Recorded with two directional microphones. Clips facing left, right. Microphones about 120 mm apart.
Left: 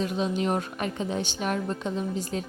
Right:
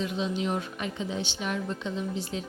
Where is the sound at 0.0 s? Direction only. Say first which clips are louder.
Left 3 dB; 45° left (ahead or behind).